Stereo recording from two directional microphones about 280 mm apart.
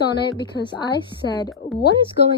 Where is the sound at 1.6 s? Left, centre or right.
Left.